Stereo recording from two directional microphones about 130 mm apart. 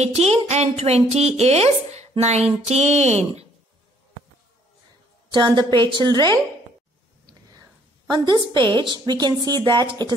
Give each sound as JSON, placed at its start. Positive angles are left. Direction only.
{"t": 0.0, "sound": "a woman's voice", "side_deg": -55}
{"t": 5.3, "sound": "a woman's voice", "side_deg": -35}
{"t": 8.1, "sound": "a woman's voice", "side_deg": -30}